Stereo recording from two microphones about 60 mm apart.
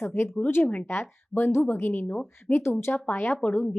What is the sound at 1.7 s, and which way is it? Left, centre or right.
A woman's voice, left.